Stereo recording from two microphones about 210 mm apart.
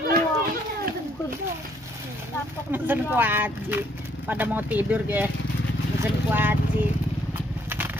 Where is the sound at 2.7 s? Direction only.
10° right (ahead or behind).